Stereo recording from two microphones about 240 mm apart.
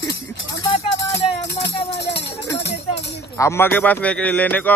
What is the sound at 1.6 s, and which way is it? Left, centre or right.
Music, left.